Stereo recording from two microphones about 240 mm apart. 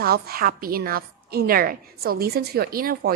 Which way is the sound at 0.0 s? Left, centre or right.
Right.